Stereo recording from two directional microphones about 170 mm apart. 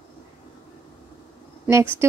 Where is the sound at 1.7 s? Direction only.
15° right (ahead or behind).